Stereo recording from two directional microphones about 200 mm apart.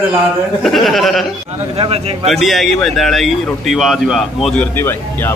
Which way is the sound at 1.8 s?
30° right (ahead or behind).